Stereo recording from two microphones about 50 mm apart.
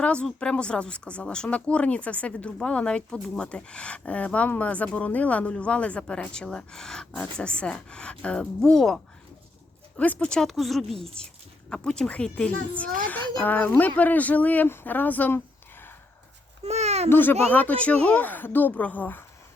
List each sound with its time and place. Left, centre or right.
0.0 s a woman's voice: left
8.7 s speech: centre
10.0 s speech: left
10.4 s a woman's voice: centre; by 15.3 s left
17.1 s a woman's voice: left